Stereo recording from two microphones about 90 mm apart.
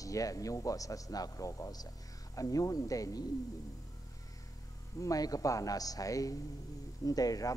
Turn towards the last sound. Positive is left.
turn(degrees=40)  # may be behind; listen again after turning